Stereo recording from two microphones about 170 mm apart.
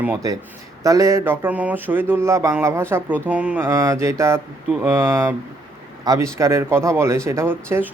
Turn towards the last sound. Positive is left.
turn(degrees=-15)  # may be behind; listen again after turning